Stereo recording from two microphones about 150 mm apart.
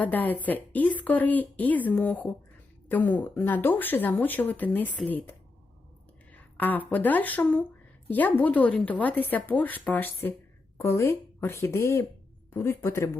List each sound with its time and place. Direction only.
0.0 s speech: 10° left (ahead or behind)
6.3 s speech: 10° left (ahead or behind)